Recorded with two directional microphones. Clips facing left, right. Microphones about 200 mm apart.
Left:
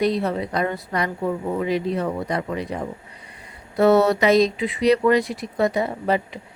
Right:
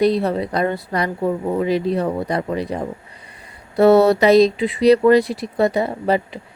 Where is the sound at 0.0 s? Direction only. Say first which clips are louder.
Right 4 dB; 35° right (ahead or behind).